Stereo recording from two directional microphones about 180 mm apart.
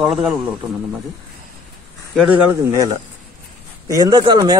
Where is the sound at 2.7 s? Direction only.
20° right (ahead or behind).